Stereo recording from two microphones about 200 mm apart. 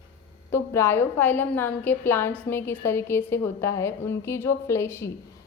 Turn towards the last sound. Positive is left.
turn(degrees=15)  # may be behind; listen again after turning